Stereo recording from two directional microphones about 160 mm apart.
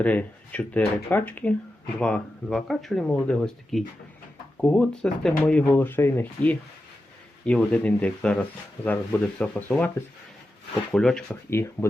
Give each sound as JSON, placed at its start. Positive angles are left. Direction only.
{"t": 0.0, "sound": "speech", "side_deg": 10}
{"t": 7.7, "sound": "speech", "side_deg": 10}
{"t": 10.9, "sound": "speech", "side_deg": 5}
{"t": 11.5, "sound": "speech", "side_deg": 15}